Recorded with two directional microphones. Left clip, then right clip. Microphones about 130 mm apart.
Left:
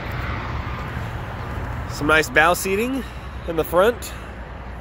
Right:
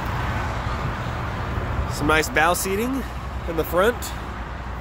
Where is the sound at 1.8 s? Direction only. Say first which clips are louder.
Left 3 dB; 15° left (ahead or behind).